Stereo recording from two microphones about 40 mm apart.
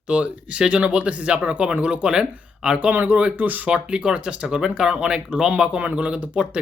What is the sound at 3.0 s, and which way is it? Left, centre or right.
Speech, right.